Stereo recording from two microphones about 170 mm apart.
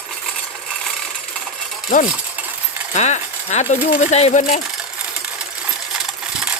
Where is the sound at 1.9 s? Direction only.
50° left (ahead or behind).